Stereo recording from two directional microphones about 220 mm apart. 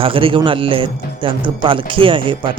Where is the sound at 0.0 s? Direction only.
25° right (ahead or behind).